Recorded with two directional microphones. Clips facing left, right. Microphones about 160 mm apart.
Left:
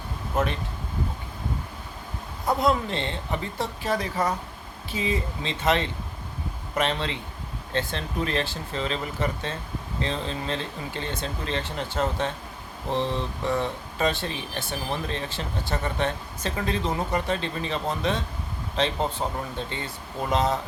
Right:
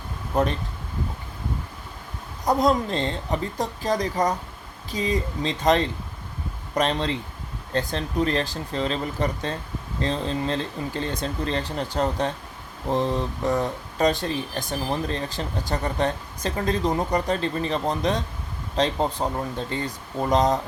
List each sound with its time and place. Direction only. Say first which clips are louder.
2.6 s speech: right 3 dB; 40° right (ahead or behind)
19.2 s speech: right 3 dB; 30° right (ahead or behind)